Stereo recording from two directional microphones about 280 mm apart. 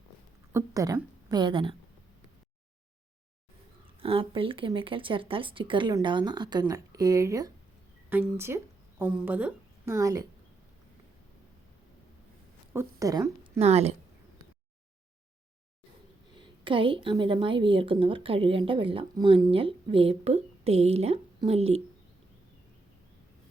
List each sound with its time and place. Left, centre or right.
0.5 s a woman's voice: centre
4.0 s a woman's voice: centre
12.7 s a woman's voice: centre
16.3 s a woman's voice: centre